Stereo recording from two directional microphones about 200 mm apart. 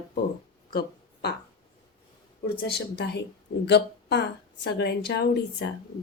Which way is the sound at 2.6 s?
55° left (ahead or behind).